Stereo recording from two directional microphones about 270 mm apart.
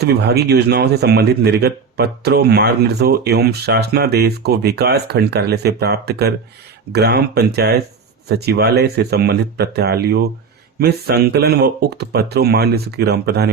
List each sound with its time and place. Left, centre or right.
0.0 s speech: right